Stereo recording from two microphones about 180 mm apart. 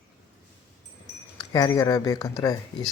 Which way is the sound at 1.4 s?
20° left (ahead or behind).